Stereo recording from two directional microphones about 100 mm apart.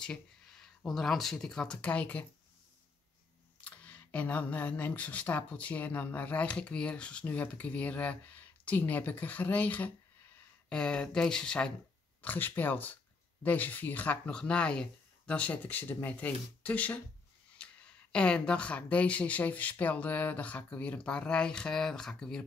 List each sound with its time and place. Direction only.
0.0 s speech: 5° left (ahead or behind)
3.6 s speech: 15° left (ahead or behind)
18.1 s speech: 10° left (ahead or behind)